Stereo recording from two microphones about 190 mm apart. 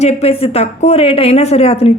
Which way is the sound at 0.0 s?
30° left (ahead or behind).